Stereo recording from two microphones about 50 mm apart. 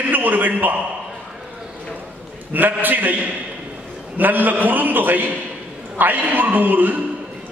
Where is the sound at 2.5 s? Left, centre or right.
Right.